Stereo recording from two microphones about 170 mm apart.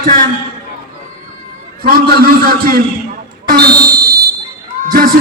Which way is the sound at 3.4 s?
70° right (ahead or behind).